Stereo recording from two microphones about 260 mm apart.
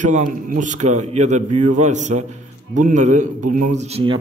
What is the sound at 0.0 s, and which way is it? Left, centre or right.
A man's voice, right.